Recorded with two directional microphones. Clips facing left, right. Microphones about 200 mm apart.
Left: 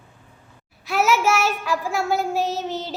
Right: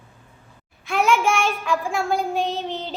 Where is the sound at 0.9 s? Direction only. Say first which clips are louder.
Even; 5° left (ahead or behind).